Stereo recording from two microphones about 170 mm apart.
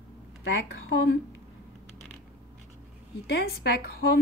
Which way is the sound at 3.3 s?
75° left (ahead or behind).